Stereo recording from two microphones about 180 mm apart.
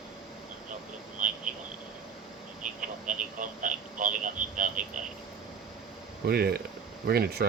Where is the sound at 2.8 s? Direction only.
45° right (ahead or behind).